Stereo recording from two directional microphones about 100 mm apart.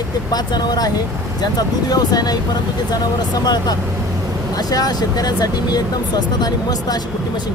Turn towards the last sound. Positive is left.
turn(degrees=45)  # may be behind; listen again after turning